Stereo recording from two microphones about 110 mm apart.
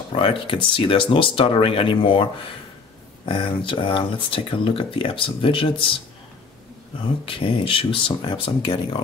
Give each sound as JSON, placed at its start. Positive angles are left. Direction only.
{"t": 0.1, "sound": "speech", "side_deg": 50}
{"t": 3.3, "sound": "speech", "side_deg": 50}
{"t": 7.2, "sound": "speech", "side_deg": 55}